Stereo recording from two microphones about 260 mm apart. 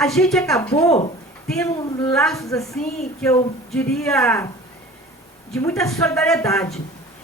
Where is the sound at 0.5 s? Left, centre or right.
Centre.